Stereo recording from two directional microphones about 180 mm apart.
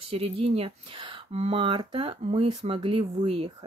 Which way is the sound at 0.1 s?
35° right (ahead or behind).